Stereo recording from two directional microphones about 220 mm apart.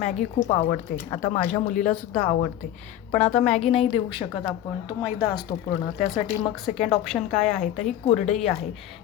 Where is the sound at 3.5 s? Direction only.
25° left (ahead or behind).